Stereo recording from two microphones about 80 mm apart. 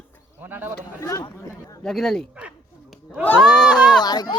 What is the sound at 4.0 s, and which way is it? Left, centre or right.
Speech, left.